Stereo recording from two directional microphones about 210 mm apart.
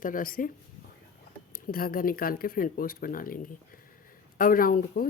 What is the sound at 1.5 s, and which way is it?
Speech, 45° left (ahead or behind).